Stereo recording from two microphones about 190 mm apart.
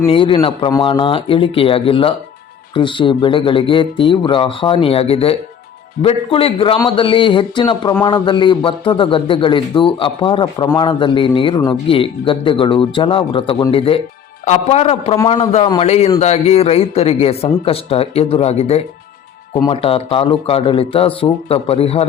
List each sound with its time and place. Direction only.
0.0 s speech: 30° left (ahead or behind)